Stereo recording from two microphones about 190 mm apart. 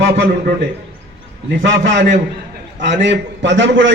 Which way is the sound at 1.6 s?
75° right (ahead or behind).